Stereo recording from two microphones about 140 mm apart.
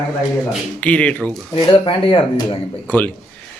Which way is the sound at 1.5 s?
35° left (ahead or behind).